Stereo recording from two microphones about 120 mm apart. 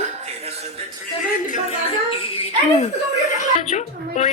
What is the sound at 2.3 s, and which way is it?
Giggle, 55° left (ahead or behind).